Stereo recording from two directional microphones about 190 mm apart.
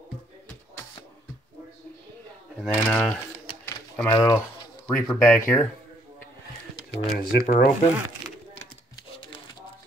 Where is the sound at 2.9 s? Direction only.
5° left (ahead or behind).